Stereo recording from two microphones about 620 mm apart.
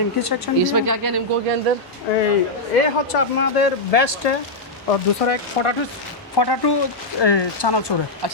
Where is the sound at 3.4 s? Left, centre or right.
Left.